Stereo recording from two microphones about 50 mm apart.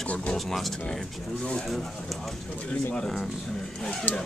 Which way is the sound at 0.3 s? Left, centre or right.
Centre.